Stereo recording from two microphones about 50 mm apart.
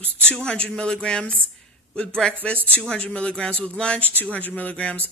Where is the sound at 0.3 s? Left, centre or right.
Left.